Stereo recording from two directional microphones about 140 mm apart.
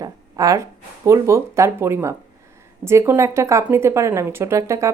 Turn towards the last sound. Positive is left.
turn(degrees=-20)  # may be behind; listen again after turning